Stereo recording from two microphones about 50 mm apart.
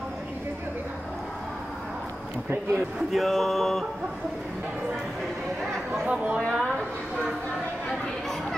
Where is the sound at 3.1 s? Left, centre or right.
Centre.